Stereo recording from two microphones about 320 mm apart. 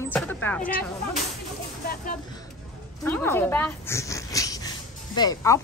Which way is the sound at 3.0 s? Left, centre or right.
Centre.